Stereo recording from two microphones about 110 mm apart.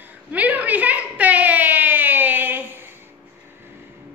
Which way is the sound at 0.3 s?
15° right (ahead or behind).